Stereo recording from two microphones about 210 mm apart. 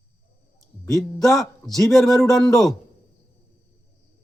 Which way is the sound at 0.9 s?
Centre (ahead or behind).